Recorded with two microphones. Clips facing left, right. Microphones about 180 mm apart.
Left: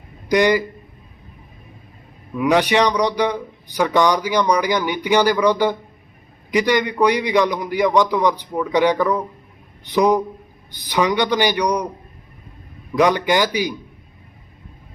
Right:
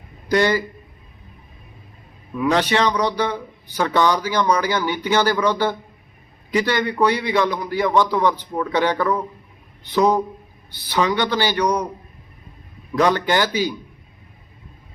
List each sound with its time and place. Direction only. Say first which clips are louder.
0.3 s a man's voice: left 2 dB; 15° left (ahead or behind)
2.4 s a man's voice: left 2 dB; 15° left (ahead or behind)
13.0 s a man's voice: left 2 dB; 10° left (ahead or behind)